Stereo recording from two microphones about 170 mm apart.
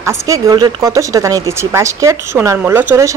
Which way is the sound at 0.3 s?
25° right (ahead or behind).